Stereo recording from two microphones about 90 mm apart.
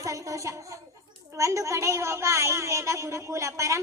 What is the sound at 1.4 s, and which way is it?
Speech, 35° right (ahead or behind).